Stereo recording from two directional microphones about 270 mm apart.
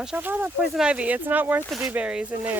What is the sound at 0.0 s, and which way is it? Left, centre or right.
Speech, centre.